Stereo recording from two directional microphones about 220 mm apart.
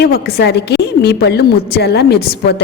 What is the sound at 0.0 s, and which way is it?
A woman's voice, 45° left (ahead or behind).